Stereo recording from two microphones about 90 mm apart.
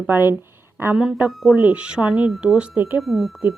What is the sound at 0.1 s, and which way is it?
Speech, 25° right (ahead or behind).